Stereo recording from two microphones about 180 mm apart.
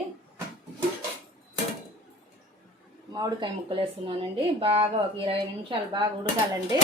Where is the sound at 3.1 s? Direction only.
20° right (ahead or behind).